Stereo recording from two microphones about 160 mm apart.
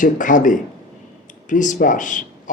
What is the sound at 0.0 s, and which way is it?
Speech, 55° left (ahead or behind).